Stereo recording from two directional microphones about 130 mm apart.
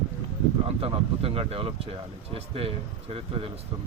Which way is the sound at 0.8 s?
45° right (ahead or behind).